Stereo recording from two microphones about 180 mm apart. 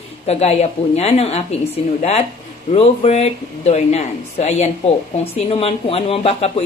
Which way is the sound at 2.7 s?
35° left (ahead or behind).